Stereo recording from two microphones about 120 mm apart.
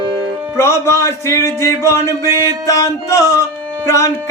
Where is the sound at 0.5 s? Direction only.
20° left (ahead or behind).